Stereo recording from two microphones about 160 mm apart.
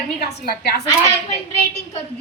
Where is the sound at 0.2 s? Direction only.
75° left (ahead or behind).